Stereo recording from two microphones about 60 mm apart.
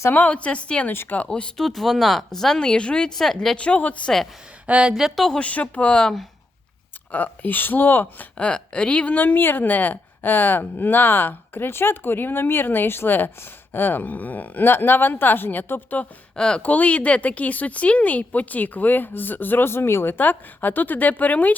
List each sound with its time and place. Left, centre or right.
0.1 s speech: left
1.3 s speech: centre
3.2 s speech: centre
3.6 s speech: left
4.6 s speech: centre
5.0 s speech: centre
5.4 s speech: left
7.1 s speech: left
8.4 s speech: centre
9.2 s speech: left
16.3 s speech: centre